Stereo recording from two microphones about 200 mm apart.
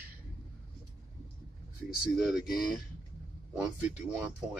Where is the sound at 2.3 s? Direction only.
Centre (ahead or behind).